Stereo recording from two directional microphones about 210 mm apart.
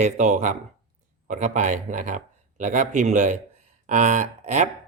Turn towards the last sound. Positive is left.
turn(degrees=-35)  # may be behind; listen again after turning